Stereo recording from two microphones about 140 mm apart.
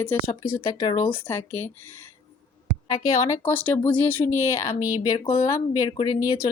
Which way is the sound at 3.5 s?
15° left (ahead or behind).